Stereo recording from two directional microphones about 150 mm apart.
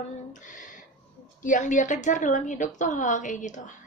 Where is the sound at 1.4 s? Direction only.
55° left (ahead or behind).